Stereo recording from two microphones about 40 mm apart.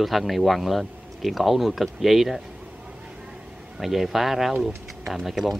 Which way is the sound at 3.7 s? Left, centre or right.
Centre.